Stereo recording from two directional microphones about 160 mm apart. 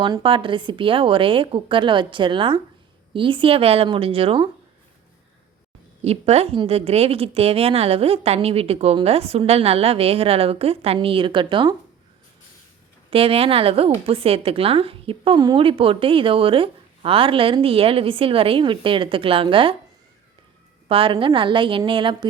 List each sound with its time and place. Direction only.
0.0 s a woman's voice: 30° right (ahead or behind)
6.0 s a woman's voice: 40° right (ahead or behind)
13.1 s a woman's voice: 35° right (ahead or behind)
20.8 s a woman's voice: 35° right (ahead or behind)